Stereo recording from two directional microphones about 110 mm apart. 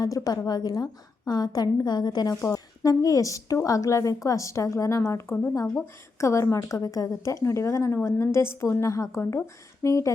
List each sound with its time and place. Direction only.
0.0 s a woman's voice: 35° left (ahead or behind)